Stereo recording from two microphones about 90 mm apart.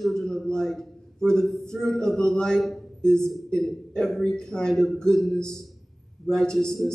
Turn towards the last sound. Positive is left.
turn(degrees=0)  # may be behind; listen again after turning